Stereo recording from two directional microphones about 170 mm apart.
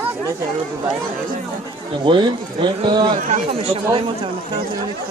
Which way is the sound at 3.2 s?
45° right (ahead or behind).